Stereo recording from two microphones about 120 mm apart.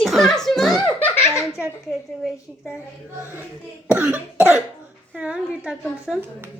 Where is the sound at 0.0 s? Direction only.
Centre (ahead or behind).